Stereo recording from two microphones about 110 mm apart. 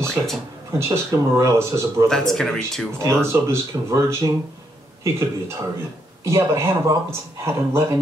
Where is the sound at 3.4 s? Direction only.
25° right (ahead or behind).